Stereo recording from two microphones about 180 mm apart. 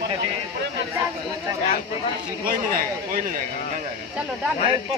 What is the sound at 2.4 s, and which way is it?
Speech, 50° right (ahead or behind).